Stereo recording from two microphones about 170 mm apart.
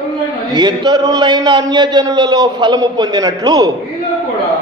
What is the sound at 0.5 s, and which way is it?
A man's voice, 25° right (ahead or behind).